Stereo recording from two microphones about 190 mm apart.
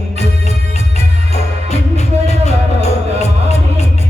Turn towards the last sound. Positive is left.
turn(degrees=35)  # may be behind; listen again after turning